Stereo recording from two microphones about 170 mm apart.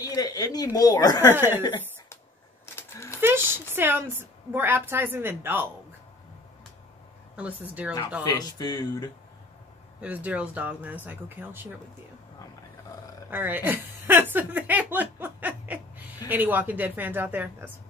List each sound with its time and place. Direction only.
0.0 s speech: 20° left (ahead or behind)
1.3 s a woman's voice: 15° right (ahead or behind)
2.6 s a sound: 15° left (ahead or behind)
3.2 s a woman's voice: 15° right (ahead or behind)
7.3 s a woman's voice: 10° right (ahead or behind)
8.2 s speech: 25° left (ahead or behind)
9.9 s a woman's voice: 10° right (ahead or behind)
13.3 s chuckle: 10° right (ahead or behind)
16.3 s a woman's voice: 10° right (ahead or behind)